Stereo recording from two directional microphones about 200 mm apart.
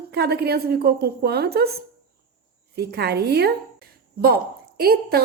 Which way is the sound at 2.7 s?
55° right (ahead or behind).